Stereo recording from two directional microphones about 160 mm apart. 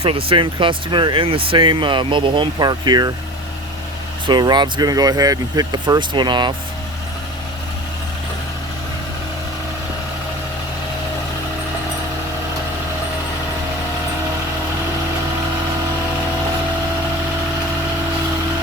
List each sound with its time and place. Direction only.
0.0 s speech: 35° right (ahead or behind)
4.3 s speech: 25° right (ahead or behind)